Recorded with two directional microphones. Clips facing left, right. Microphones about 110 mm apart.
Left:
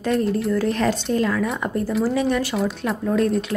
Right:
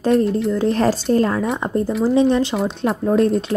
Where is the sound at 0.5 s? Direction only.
20° right (ahead or behind).